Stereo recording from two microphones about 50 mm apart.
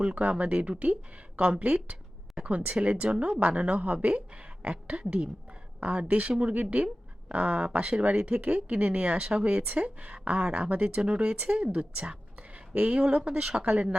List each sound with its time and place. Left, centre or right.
0.0 s speech: right